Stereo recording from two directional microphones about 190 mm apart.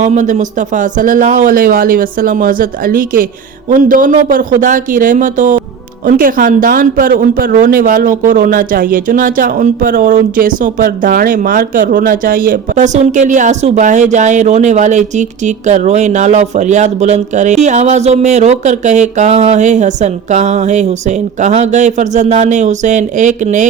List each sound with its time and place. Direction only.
0.0 s speech: 40° right (ahead or behind)